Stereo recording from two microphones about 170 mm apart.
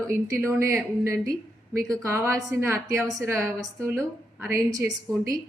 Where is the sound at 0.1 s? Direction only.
15° right (ahead or behind).